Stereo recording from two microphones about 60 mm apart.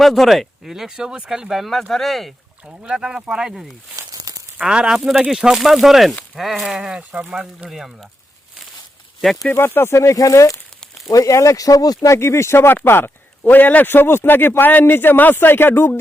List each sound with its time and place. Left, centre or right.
0.0 s speech: centre
2.6 s speech: centre
3.9 s a sound: right
4.6 s speech: centre
7.7 s speech: centre
9.2 s speech: centre
9.6 s speech: left
12.1 s speech: left